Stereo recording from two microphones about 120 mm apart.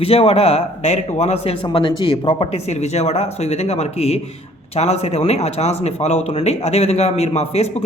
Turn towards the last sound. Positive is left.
turn(degrees=60)  # may be behind; listen again after turning